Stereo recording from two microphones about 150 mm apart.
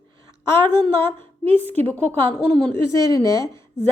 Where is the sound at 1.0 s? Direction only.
15° left (ahead or behind).